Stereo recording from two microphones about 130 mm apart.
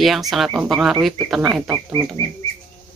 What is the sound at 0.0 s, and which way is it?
Speech, centre (ahead or behind).